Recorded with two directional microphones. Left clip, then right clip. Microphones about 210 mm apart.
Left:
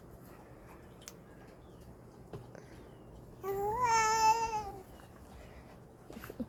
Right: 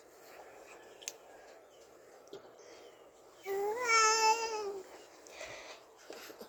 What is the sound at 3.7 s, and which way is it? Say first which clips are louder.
Babbling: even; 20° left (ahead or behind).